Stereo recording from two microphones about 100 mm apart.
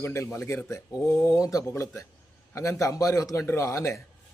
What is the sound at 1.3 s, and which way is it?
Speech, 35° left (ahead or behind).